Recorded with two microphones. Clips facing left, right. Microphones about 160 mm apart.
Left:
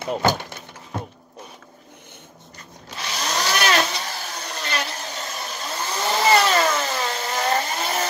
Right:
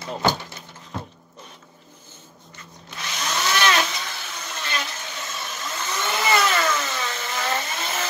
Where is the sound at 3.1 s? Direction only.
35° left (ahead or behind).